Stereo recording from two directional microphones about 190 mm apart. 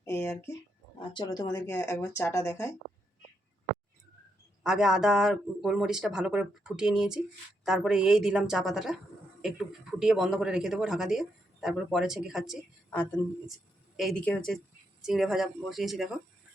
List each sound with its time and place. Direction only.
0.0 s speech: 15° left (ahead or behind)
4.6 s speech: 5° right (ahead or behind)
10.0 s speech: 5° right (ahead or behind)
13.9 s speech: centre (ahead or behind)